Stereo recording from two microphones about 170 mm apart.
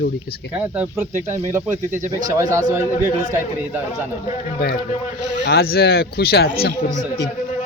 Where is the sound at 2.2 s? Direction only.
20° right (ahead or behind).